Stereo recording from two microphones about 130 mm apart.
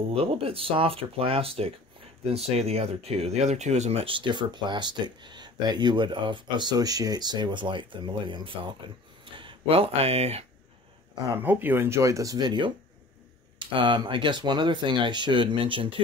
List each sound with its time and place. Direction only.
0.2 s speech: 45° right (ahead or behind)
11.2 s speech: 15° right (ahead or behind); by 16.0 s 40° right (ahead or behind)